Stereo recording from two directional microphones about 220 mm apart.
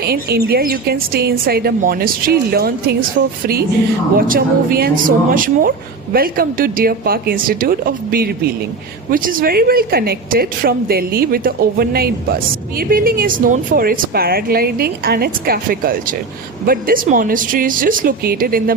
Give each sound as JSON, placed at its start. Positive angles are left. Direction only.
{"t": 0.0, "sound": "a woman's voice", "side_deg": -45}